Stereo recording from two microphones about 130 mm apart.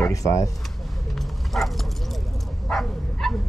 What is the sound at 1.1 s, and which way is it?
Bow-wow, centre (ahead or behind).